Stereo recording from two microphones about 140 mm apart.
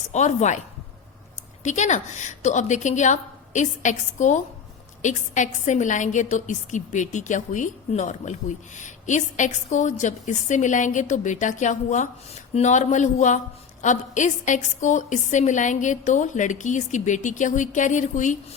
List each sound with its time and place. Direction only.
0.1 s a woman's voice: 55° left (ahead or behind)
1.6 s a woman's voice: 60° left (ahead or behind)